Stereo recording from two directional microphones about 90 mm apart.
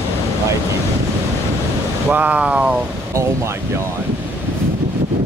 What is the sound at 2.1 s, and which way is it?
Speech, 20° right (ahead or behind).